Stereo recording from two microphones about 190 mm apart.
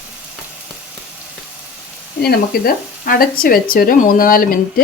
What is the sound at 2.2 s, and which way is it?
A woman's voice, 55° left (ahead or behind).